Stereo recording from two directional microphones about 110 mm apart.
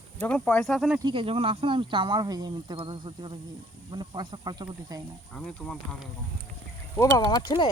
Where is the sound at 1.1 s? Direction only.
60° right (ahead or behind); by 5.0 s 40° right (ahead or behind).